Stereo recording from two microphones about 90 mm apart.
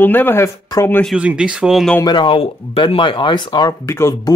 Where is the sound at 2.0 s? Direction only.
65° left (ahead or behind).